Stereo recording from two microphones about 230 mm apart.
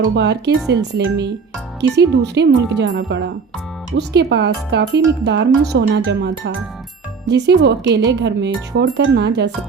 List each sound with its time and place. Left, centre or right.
0.2 s speech: right